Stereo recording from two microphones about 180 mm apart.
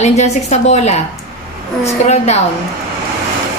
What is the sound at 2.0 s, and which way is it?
Speech, 40° left (ahead or behind).